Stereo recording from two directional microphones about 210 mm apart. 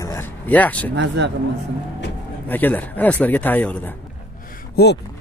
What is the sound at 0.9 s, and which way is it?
Speech, 55° right (ahead or behind).